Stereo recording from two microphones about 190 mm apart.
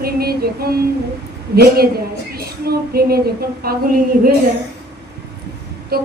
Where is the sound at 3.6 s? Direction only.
50° right (ahead or behind).